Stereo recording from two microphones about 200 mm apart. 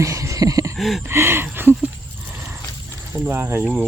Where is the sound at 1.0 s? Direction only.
10° right (ahead or behind).